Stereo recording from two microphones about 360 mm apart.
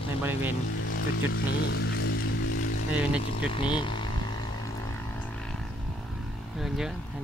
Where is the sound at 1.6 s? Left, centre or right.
Left.